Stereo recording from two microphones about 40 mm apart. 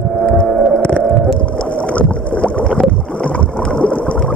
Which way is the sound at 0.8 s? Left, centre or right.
Left.